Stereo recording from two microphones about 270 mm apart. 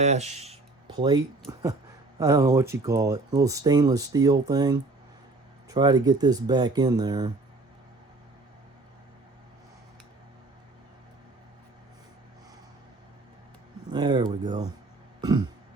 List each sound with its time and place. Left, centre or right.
0.0 s speech: right
13.9 s speech: centre
15.2 s throat clearing: centre